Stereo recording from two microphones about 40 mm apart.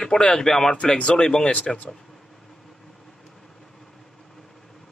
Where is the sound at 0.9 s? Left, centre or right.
Left.